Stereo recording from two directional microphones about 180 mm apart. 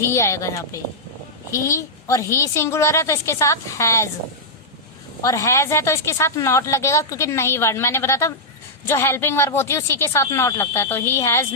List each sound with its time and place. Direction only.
0.0 s a woman's voice: 15° left (ahead or behind)
5.2 s a woman's voice: 20° left (ahead or behind)